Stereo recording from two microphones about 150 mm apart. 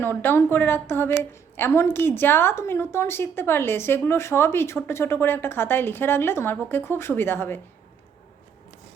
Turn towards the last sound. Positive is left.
turn(degrees=15)  # may be behind; listen again after turning